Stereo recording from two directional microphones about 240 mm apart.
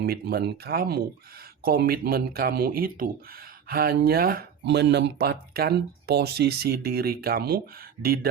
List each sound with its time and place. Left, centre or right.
0.0 s speech: right